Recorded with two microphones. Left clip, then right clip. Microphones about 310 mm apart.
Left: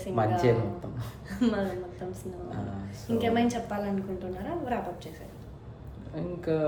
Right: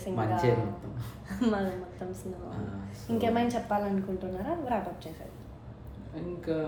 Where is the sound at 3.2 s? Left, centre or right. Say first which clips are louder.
Left 1 dB; centre.